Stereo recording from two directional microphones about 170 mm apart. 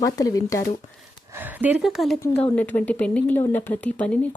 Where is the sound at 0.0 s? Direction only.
20° left (ahead or behind).